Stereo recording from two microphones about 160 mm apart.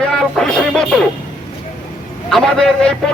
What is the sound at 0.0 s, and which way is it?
Music, 5° left (ahead or behind).